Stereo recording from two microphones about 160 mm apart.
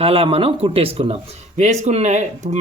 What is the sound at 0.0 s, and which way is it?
Speech, 35° right (ahead or behind).